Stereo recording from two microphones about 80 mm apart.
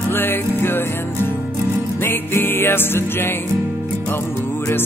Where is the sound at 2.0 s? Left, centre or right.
Left.